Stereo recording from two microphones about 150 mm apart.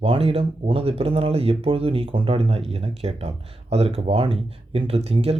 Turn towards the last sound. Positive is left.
turn(degrees=-40)  # may be behind; listen again after turning